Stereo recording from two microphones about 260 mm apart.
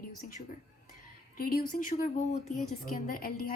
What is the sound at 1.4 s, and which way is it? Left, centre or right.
A woman's voice, left.